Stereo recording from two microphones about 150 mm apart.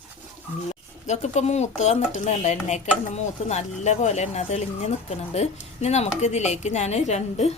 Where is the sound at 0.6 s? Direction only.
50° left (ahead or behind).